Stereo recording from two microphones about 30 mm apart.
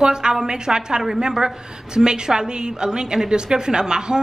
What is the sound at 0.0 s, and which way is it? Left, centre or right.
A woman's voice, right.